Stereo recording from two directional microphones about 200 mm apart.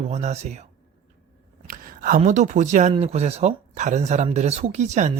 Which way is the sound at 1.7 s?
45° right (ahead or behind).